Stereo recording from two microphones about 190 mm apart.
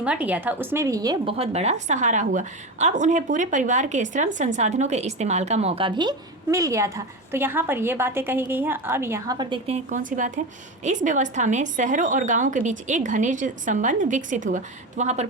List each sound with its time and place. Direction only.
0.0 s a woman's voice: 5° right (ahead or behind); by 15.3 s 35° right (ahead or behind)